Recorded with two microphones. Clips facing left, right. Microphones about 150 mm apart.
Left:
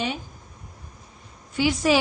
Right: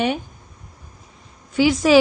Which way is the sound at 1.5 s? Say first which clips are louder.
Right 6 dB; 90° right.